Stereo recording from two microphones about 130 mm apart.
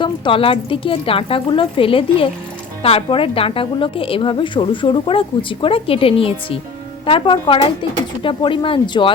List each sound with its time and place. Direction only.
0.0 s a woman's voice: 45° left (ahead or behind)